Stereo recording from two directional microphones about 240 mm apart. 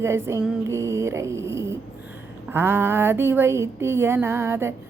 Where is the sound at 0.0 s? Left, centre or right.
Centre.